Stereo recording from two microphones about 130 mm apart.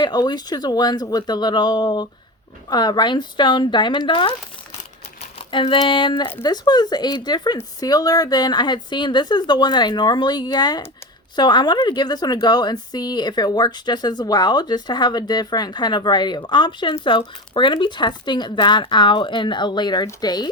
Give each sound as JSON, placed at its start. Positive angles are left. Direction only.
{"t": 0.0, "sound": "a woman's voice", "side_deg": 35}